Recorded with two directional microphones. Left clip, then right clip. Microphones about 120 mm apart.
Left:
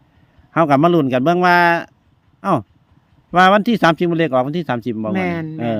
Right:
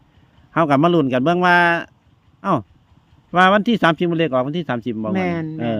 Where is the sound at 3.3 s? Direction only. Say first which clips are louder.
Left 2 dB; 40° left (ahead or behind).